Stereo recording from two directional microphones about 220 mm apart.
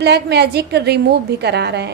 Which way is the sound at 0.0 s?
50° right (ahead or behind).